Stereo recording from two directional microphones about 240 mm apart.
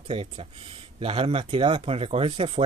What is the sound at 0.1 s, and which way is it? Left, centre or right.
Speech, right.